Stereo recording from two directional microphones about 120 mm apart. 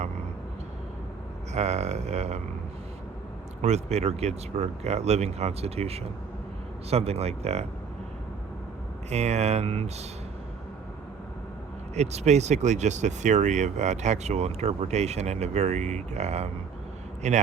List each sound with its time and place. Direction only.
1.5 s speech: 70° right (ahead or behind)
3.6 s speech: 65° right (ahead or behind)
9.0 s speech: 65° right (ahead or behind)
11.9 s speech: 70° right (ahead or behind)